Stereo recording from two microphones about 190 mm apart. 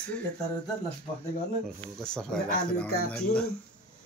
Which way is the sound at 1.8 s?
5° left (ahead or behind).